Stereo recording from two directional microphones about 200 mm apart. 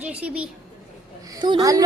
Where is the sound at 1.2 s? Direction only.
20° right (ahead or behind).